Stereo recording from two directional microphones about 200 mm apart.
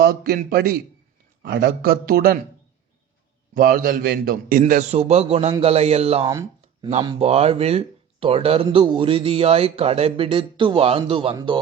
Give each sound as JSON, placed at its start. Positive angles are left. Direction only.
{"t": 0.0, "sound": "a man's voice", "side_deg": -50}
{"t": 3.5, "sound": "a man's voice", "side_deg": -45}